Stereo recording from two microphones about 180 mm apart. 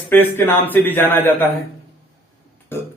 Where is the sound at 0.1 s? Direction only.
10° left (ahead or behind).